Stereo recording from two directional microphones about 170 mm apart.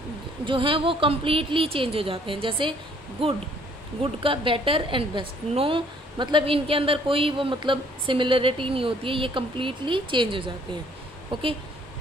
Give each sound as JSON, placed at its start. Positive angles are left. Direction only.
{"t": 0.5, "sound": "a woman's voice", "side_deg": -30}